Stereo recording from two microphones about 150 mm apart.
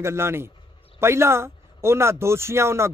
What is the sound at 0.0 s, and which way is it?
Speech, 15° right (ahead or behind).